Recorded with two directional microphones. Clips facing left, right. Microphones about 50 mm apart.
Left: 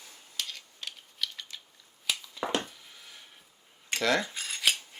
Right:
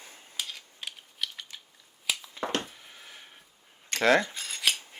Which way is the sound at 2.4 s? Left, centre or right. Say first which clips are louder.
Left 1 dB; right.